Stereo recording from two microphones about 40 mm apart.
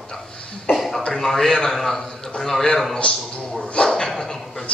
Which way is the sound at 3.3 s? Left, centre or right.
Left.